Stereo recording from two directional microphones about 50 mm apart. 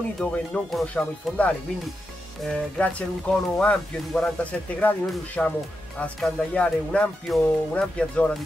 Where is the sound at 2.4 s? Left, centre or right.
Centre.